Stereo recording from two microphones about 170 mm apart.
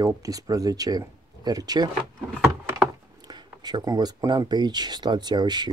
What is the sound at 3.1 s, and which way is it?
Speech, 25° right (ahead or behind).